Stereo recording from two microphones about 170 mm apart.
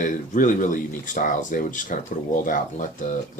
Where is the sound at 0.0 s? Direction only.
50° left (ahead or behind).